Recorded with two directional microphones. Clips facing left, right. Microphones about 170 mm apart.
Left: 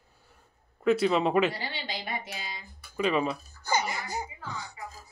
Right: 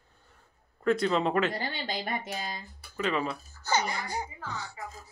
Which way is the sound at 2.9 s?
15° left (ahead or behind).